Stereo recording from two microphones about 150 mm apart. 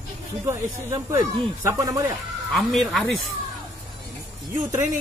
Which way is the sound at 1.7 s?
25° right (ahead or behind).